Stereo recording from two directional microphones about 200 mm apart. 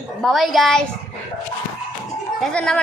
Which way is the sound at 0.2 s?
Centre (ahead or behind).